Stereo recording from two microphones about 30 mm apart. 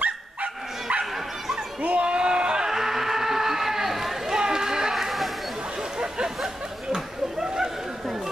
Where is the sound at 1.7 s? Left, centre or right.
Right.